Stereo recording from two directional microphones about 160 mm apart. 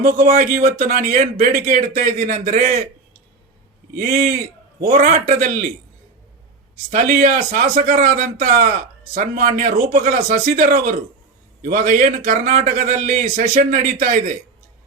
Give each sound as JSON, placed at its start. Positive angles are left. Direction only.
{"t": 0.0, "sound": "speech", "side_deg": -55}
{"t": 3.9, "sound": "a man's voice", "side_deg": -50}
{"t": 6.9, "sound": "speech", "side_deg": -55}